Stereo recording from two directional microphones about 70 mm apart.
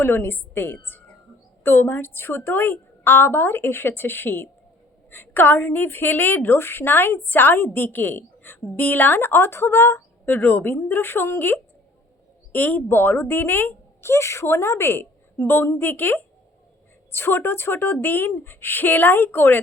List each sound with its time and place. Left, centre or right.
0.0 s a woman's voice: left